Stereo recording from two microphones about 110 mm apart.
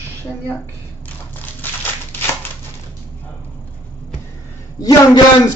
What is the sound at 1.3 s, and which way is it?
Crumpling, 20° left (ahead or behind).